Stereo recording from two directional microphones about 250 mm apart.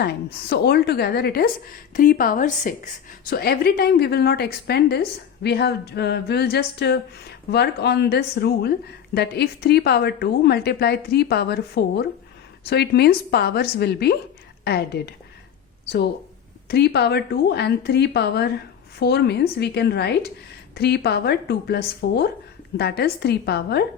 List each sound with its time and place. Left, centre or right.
0.4 s a woman's voice: left
16.6 s a woman's voice: left